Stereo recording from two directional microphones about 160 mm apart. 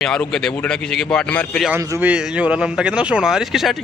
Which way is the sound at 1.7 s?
15° right (ahead or behind).